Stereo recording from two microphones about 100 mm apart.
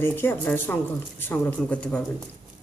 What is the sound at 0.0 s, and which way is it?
Speech, 20° left (ahead or behind).